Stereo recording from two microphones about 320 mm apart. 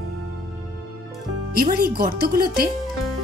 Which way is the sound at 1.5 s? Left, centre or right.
Right.